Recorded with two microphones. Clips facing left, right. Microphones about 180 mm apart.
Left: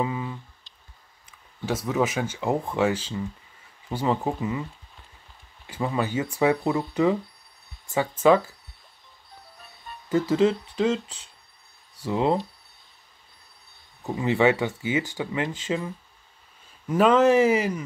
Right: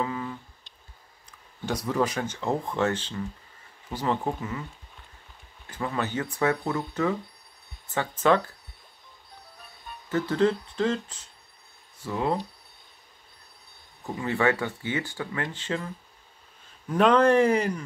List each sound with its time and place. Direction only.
0.0 s a sound: 10° left (ahead or behind)
1.7 s speech: centre (ahead or behind)
5.7 s speech: 10° left (ahead or behind)
8.2 s speech: 5° left (ahead or behind)
10.0 s speech: 10° left (ahead or behind)
12.1 s speech: 20° left (ahead or behind)
14.0 s speech: 20° left (ahead or behind)
16.9 s speech: 5° left (ahead or behind)